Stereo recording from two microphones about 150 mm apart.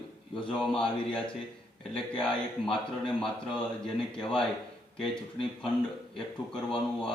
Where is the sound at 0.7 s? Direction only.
5° left (ahead or behind).